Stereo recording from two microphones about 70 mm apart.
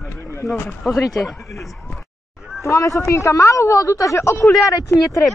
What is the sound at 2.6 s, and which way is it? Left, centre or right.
Speech, left.